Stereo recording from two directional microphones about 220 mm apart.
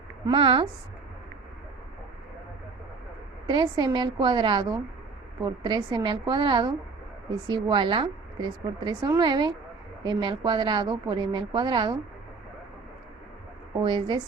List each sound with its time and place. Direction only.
0.3 s a woman's voice: 25° right (ahead or behind)
3.4 s a woman's voice: 20° right (ahead or behind)
13.8 s a woman's voice: 20° right (ahead or behind)